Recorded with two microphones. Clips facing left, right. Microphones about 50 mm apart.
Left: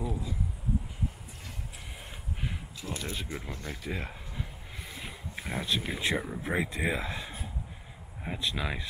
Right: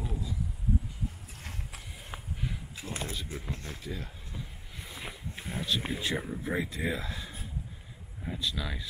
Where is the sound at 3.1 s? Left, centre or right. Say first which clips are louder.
Left 1 dB; left.